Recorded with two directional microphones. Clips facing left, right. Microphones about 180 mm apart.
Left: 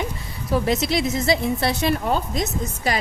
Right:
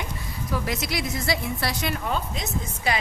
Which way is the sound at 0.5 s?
25° left (ahead or behind).